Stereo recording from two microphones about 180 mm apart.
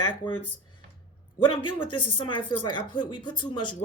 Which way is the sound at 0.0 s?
25° left (ahead or behind).